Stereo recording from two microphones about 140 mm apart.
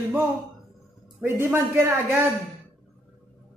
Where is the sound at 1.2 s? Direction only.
20° right (ahead or behind).